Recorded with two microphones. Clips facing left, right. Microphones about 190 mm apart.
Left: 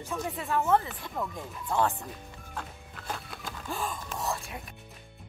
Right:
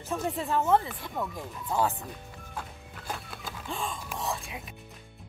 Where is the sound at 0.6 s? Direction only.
10° right (ahead or behind).